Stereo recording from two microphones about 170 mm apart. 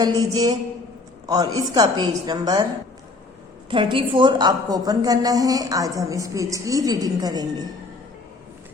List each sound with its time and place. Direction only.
0.0 s a woman's voice: 25° right (ahead or behind)
3.7 s a woman's voice: 30° right (ahead or behind)